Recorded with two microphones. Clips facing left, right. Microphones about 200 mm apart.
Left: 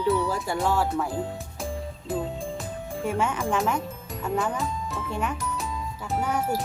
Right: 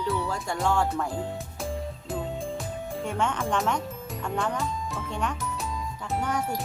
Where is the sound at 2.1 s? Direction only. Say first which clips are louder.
Left 2 dB; centre (ahead or behind).